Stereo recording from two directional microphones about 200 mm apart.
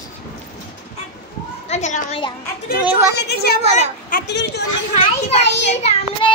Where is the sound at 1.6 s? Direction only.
35° left (ahead or behind).